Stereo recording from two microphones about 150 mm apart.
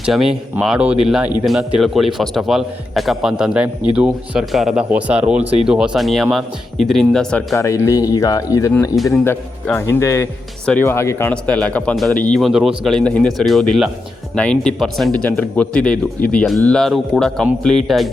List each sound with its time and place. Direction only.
0.0 s speech: 5° right (ahead or behind)
7.5 s speech: 20° left (ahead or behind); by 18.1 s centre (ahead or behind)